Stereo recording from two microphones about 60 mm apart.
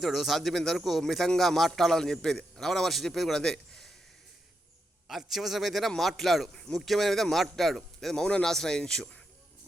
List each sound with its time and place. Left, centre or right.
0.0 s a man's voice: centre
5.0 s a man's voice: centre
6.5 s a man's voice: centre